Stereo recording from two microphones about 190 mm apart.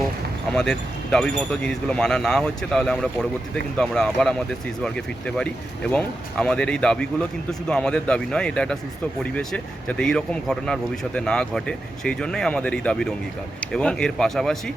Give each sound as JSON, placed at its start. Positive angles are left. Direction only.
{"t": 0.5, "sound": "speech", "side_deg": 5}